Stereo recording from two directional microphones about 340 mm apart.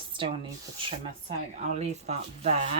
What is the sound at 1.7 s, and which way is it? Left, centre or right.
Speech, centre.